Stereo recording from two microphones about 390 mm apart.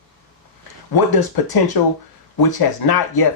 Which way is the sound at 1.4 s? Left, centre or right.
Left.